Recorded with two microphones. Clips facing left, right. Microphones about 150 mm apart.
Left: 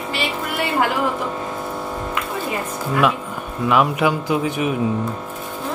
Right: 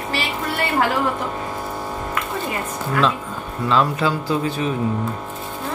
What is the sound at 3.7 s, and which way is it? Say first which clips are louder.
Speech: left 2 dB; 15° left (ahead or behind).